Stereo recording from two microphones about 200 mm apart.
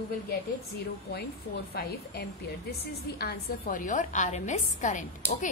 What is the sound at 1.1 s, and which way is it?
A woman's voice, 50° left (ahead or behind).